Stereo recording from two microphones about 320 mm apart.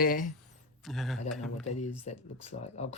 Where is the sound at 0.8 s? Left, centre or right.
Centre.